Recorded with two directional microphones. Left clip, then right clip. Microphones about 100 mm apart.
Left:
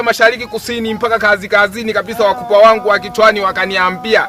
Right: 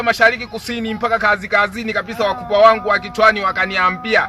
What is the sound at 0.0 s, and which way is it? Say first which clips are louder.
Speech: left 3 dB; 45° left (ahead or behind).